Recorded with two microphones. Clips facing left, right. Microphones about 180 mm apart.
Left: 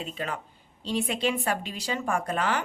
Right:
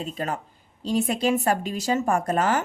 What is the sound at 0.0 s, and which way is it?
Speech, 40° right (ahead or behind).